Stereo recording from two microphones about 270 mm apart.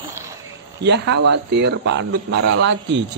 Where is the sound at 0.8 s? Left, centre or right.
Right.